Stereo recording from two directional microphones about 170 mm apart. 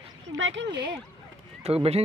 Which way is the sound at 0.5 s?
90° right.